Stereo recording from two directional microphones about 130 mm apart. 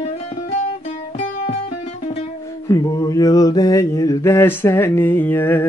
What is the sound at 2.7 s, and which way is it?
Mantra, 25° left (ahead or behind).